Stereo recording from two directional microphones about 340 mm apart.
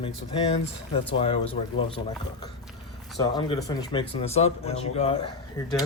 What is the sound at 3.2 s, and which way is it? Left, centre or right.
Speech, centre.